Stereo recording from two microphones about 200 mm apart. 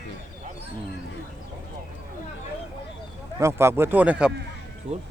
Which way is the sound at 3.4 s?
15° right (ahead or behind).